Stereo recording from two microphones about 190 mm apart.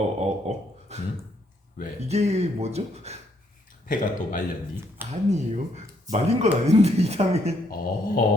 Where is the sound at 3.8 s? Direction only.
45° left (ahead or behind).